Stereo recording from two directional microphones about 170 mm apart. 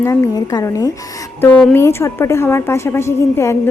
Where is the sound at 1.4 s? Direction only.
10° left (ahead or behind).